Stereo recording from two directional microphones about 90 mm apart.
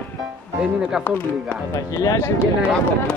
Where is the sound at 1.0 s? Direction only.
20° left (ahead or behind).